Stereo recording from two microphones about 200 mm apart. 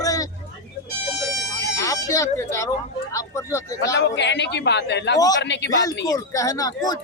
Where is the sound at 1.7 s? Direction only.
15° left (ahead or behind).